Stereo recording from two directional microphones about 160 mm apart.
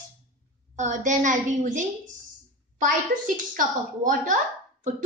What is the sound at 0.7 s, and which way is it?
A woman's voice, 50° right (ahead or behind).